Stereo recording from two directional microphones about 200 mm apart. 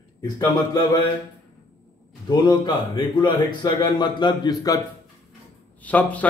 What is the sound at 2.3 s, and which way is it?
A man's voice, 20° left (ahead or behind).